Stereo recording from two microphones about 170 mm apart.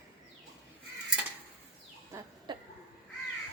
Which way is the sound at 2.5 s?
25° right (ahead or behind).